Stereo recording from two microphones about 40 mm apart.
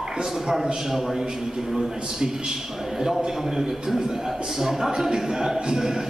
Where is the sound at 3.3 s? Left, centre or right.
Centre.